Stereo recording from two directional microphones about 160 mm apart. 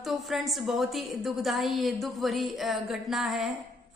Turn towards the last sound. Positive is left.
turn(degrees=0)  # may be behind; listen again after turning